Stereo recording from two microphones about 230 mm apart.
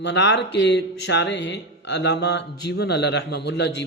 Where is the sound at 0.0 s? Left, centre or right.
Left.